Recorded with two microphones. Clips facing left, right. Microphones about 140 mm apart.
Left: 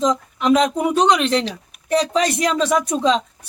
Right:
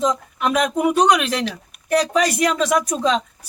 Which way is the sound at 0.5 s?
25° left (ahead or behind).